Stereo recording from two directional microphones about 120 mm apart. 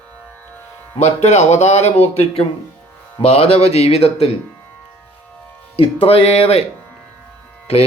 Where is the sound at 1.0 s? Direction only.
70° left (ahead or behind).